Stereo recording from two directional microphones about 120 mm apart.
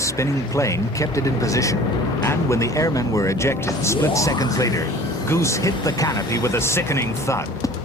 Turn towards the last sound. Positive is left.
turn(degrees=25)  # may be behind; listen again after turning